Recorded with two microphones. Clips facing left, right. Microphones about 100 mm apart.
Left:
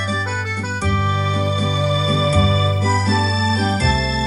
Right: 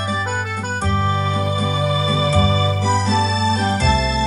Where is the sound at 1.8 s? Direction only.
35° right (ahead or behind).